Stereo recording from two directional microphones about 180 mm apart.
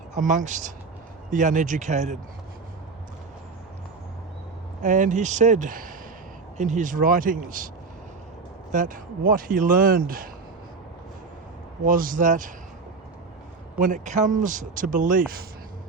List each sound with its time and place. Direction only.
0.1 s a man's voice: 45° right (ahead or behind)
4.8 s a man's voice: 45° right (ahead or behind)
8.7 s a man's voice: 45° right (ahead or behind)
11.9 s a man's voice: 50° right (ahead or behind)
13.7 s a man's voice: 45° right (ahead or behind)